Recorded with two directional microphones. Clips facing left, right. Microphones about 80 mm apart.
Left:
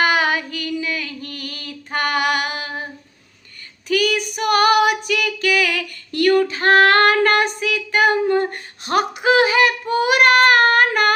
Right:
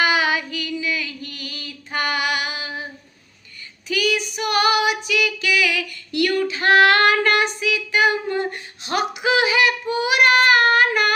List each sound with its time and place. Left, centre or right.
0.0 s female singing: left